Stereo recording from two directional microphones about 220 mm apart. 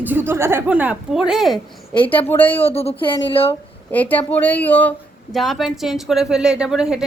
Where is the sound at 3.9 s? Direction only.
5° left (ahead or behind).